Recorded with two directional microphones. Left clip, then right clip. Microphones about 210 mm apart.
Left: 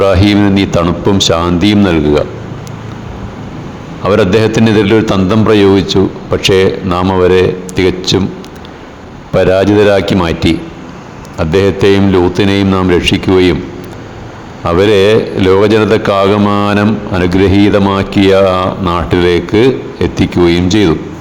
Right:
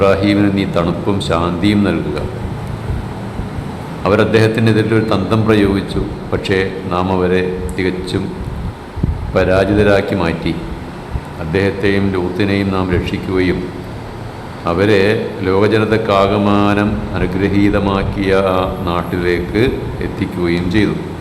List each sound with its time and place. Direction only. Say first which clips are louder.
0.0 s a man's voice: left 3 dB; 35° left (ahead or behind)
4.0 s a man's voice: left 3 dB; 35° left (ahead or behind)
9.3 s a man's voice: left 5 dB; 40° left (ahead or behind)
14.7 s a man's voice: left 5 dB; 40° left (ahead or behind)